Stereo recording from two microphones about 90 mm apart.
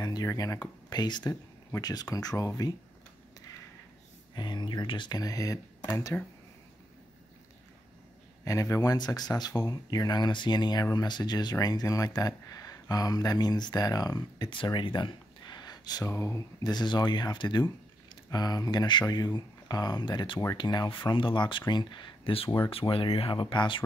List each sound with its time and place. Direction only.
0.0 s a sound: 45° left (ahead or behind)
0.3 s speech: 40° left (ahead or behind)
4.4 s speech: 55° left (ahead or behind)
5.2 s speech: 40° left (ahead or behind)
8.5 s speech: 35° left (ahead or behind)
8.9 s speech: 50° left (ahead or behind)
14.5 s speech: 65° left (ahead or behind); by 16.1 s 45° left (ahead or behind)
16.1 s speech: 30° left (ahead or behind)
16.6 s speech: 55° left (ahead or behind); by 23.4 s 90° left
23.4 s speech: 60° left (ahead or behind)